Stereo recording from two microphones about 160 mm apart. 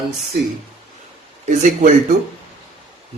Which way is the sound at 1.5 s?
50° right (ahead or behind).